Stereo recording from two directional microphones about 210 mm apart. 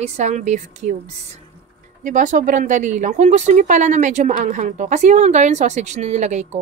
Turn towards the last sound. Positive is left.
turn(degrees=-35)  # may be behind; listen again after turning